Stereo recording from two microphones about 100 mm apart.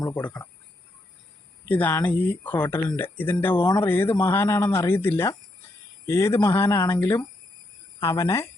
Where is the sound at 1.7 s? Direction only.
15° left (ahead or behind).